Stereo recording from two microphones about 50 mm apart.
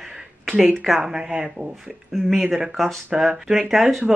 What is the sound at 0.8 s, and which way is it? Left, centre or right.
Speech, centre.